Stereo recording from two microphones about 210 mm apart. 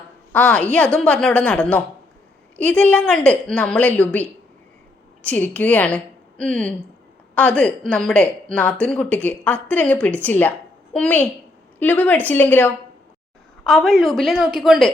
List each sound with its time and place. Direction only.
0.3 s a woman's voice: 5° left (ahead or behind)
5.2 s a woman's voice: 10° left (ahead or behind)